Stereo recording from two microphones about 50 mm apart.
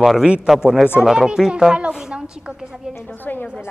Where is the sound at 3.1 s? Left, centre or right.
Left.